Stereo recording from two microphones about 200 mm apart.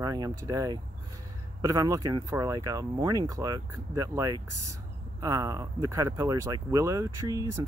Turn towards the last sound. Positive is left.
turn(degrees=-15)  # may be behind; listen again after turning